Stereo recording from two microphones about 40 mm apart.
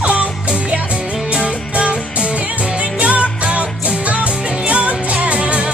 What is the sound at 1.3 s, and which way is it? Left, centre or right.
Music, right.